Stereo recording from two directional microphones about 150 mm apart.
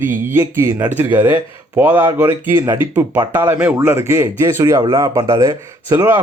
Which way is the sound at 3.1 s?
25° right (ahead or behind).